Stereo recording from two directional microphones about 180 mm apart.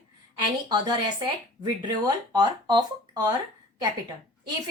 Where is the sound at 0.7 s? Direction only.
25° right (ahead or behind).